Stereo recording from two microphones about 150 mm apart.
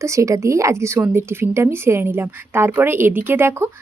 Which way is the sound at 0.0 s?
20° right (ahead or behind).